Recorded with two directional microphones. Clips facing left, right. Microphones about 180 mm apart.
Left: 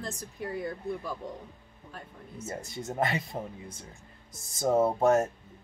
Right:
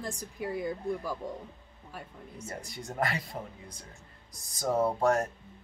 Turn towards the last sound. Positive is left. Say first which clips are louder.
# left 3 dB
turn(degrees=25)  # may be behind; listen again after turning